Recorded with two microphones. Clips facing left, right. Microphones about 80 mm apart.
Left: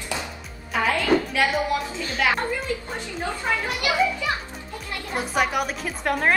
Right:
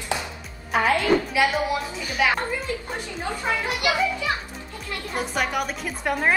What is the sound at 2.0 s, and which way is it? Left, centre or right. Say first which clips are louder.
Speech: right 4 dB; centre.